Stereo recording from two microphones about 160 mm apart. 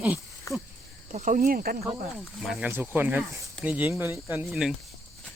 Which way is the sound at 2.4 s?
5° right (ahead or behind).